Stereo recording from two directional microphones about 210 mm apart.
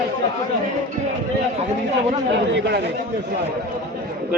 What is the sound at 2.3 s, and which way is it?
Speech, 55° right (ahead or behind).